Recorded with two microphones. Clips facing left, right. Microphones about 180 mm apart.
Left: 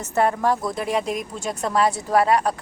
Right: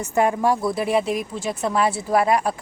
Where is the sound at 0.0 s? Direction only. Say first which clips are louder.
Right 1 dB; 10° right (ahead or behind).